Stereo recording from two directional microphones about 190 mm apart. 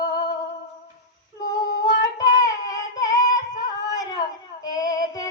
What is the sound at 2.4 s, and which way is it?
Child singing, 20° left (ahead or behind).